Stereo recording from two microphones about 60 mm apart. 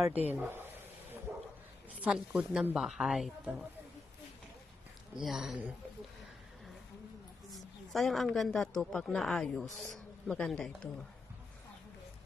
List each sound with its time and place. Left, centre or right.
0.1 s speech: right
1.3 s bow-wow: right
2.0 s speech: centre
5.1 s speech: centre
7.5 s a woman's voice: centre